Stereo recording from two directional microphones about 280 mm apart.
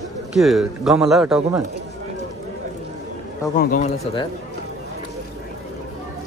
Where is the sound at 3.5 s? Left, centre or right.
Left.